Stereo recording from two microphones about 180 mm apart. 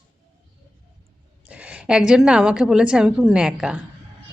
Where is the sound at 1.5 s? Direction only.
5° right (ahead or behind).